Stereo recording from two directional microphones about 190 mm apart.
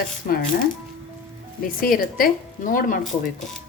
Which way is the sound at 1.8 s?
50° left (ahead or behind).